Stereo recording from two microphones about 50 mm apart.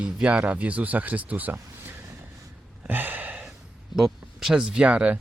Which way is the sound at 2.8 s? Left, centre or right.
Right.